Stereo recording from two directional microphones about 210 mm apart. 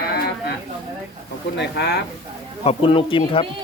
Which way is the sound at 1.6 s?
55° left (ahead or behind).